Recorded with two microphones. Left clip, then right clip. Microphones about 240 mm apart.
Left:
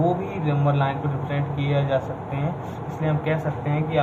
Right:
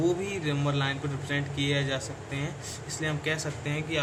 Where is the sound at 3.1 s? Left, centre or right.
Right.